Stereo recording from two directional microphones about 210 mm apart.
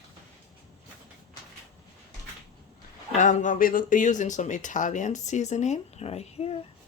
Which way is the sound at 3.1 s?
35° left (ahead or behind).